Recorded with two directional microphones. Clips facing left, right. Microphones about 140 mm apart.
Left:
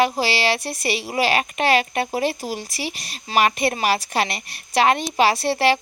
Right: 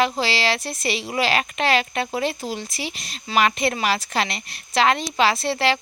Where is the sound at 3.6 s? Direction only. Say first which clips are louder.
Left 2 dB; 35° left (ahead or behind).